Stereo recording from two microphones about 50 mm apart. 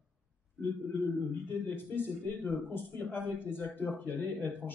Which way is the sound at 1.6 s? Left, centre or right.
Left.